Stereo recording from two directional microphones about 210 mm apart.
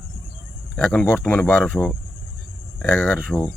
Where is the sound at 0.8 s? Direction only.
5° left (ahead or behind).